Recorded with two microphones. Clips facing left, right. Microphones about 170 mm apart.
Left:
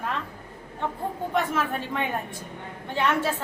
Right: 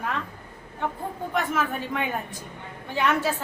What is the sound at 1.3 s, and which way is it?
Speech, 5° right (ahead or behind).